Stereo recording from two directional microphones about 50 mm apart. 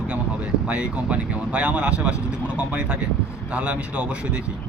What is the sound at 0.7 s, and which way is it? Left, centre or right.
A man's voice, right.